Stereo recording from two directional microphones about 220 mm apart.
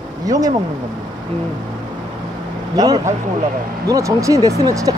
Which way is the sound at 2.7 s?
15° right (ahead or behind).